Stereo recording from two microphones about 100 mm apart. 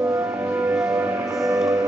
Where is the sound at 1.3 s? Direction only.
35° right (ahead or behind).